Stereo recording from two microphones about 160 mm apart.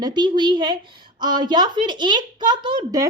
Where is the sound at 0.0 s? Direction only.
30° right (ahead or behind).